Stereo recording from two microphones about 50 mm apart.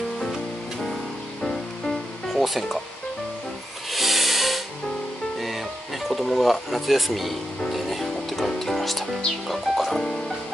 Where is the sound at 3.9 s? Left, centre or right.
Centre.